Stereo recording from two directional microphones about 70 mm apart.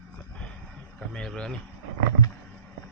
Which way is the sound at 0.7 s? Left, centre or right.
Centre.